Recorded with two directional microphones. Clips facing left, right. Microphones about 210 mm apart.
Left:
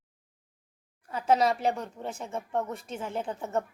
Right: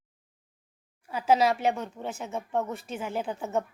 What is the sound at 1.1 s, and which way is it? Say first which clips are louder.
A woman's voice: right 1 dB; 5° right (ahead or behind).